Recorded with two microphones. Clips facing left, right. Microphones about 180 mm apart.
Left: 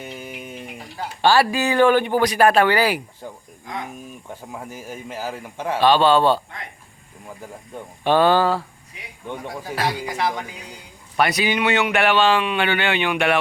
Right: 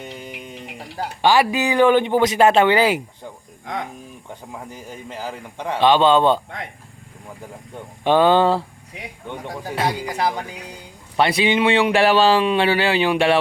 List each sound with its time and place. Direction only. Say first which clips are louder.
0.0 s guitar: even; 5° left (ahead or behind)
1.2 s speech: even; 15° right (ahead or behind)
4.5 s a man's voice: left 2 dB; 5° left (ahead or behind)
5.8 s speech: right 1 dB; 20° right (ahead or behind)
8.0 s speech: right 2 dB; 15° right (ahead or behind)
9.7 s speech: right 2 dB; 25° right (ahead or behind)